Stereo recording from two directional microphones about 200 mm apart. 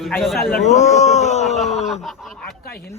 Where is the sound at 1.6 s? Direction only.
Centre (ahead or behind).